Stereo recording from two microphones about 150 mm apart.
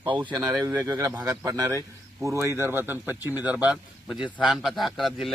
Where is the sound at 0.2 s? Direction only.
15° right (ahead or behind).